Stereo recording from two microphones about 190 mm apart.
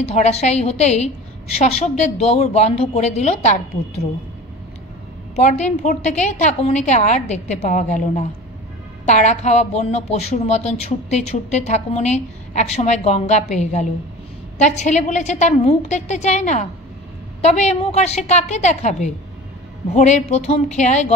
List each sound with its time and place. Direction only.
0.0 s speech: 35° left (ahead or behind)
5.3 s speech: 35° left (ahead or behind)